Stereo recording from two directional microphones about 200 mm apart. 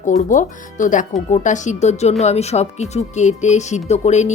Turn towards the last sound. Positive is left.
turn(degrees=35)  # may be behind; listen again after turning